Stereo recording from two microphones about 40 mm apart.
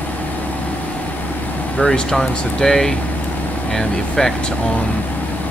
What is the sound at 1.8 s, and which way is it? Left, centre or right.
Speech, centre.